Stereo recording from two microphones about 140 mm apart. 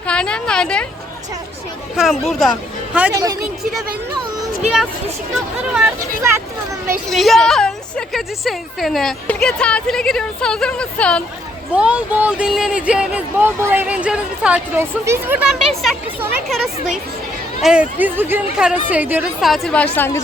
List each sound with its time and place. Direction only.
0.1 s a woman's voice: 5° left (ahead or behind)
2.0 s a woman's voice: centre (ahead or behind)
5.3 s a woman's voice: 5° right (ahead or behind)
7.1 s a woman's voice: centre (ahead or behind)
11.7 s speech: 10° right (ahead or behind)
15.4 s a woman's voice: centre (ahead or behind)
17.6 s speech: 5° right (ahead or behind)
19.4 s a woman's voice: centre (ahead or behind)